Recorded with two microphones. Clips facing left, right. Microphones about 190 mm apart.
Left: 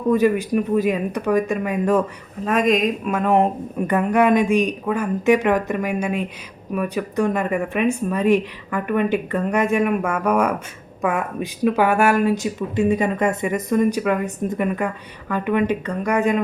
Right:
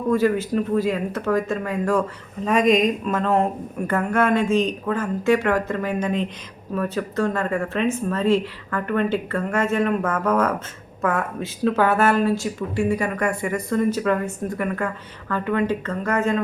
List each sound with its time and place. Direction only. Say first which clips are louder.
0.1 s a woman's voice: left 2 dB; 15° left (ahead or behind)
2.4 s a woman's voice: right 1 dB; centre (ahead or behind)